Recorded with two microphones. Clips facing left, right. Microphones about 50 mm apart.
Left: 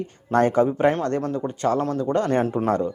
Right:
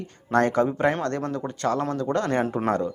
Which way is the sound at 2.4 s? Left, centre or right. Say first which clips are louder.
Left 2 dB; centre.